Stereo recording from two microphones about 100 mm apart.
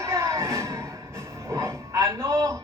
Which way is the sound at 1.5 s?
25° right (ahead or behind).